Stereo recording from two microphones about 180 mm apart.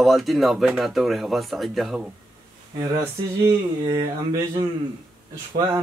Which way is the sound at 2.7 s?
20° right (ahead or behind).